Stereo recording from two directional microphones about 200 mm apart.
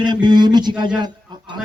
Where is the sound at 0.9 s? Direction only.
20° right (ahead or behind).